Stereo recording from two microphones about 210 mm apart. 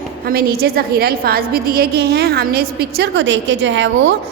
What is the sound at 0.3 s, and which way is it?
A woman's voice, 45° right (ahead or behind).